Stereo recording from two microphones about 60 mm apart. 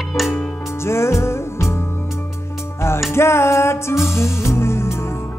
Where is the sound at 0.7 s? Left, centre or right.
Left.